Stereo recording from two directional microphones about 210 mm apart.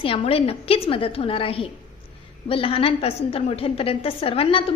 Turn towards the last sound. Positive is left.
turn(degrees=25)  # may be behind; listen again after turning